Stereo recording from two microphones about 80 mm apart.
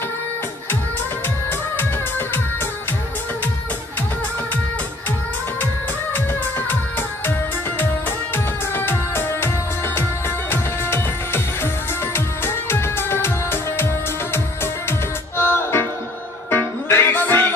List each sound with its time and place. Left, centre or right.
1.8 s music: left
6.7 s music of bollywood: left
8.7 s music: left
10.5 s music: left